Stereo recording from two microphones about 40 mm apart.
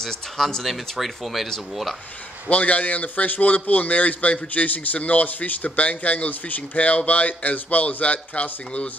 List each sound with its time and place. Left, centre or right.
0.0 s speech: centre
0.7 s speech: centre
2.5 s a man's voice: left